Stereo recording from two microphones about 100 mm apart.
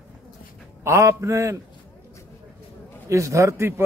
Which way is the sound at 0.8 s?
30° right (ahead or behind).